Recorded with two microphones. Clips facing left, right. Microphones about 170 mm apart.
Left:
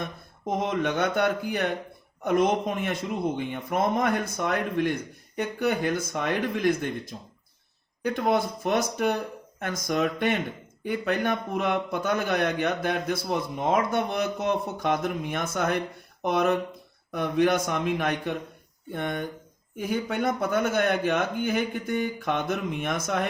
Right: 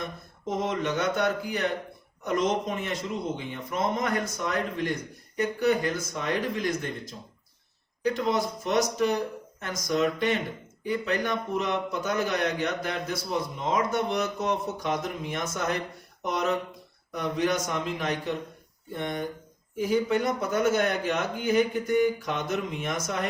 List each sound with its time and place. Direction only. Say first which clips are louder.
0.4 s a man's voice: left 2 dB; 55° left (ahead or behind)